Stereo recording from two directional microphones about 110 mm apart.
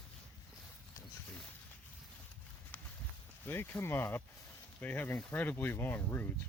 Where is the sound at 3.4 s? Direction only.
20° left (ahead or behind).